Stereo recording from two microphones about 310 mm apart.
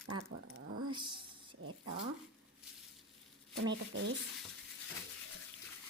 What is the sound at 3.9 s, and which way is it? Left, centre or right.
Speech, right.